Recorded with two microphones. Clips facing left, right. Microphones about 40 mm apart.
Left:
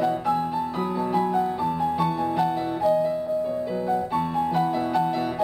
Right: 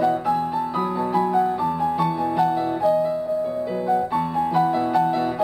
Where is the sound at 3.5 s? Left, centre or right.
Centre.